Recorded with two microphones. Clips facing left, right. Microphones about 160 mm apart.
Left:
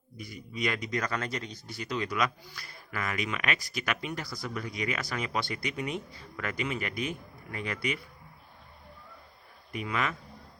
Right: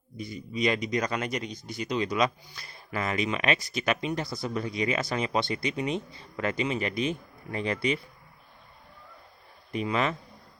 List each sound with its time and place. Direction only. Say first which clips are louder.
0.2 s speech: right 5 dB; 25° right (ahead or behind)
9.7 s speech: right 5 dB; 25° right (ahead or behind)